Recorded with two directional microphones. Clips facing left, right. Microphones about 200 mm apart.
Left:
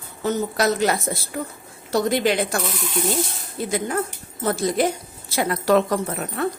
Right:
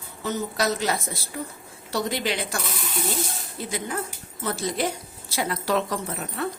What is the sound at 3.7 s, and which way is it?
Speech, 50° left (ahead or behind).